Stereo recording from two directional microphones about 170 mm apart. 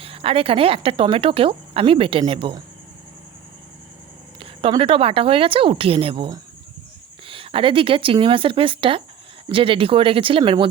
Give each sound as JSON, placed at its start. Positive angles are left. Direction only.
{"t": 0.0, "sound": "speech", "side_deg": -35}
{"t": 4.4, "sound": "speech", "side_deg": -30}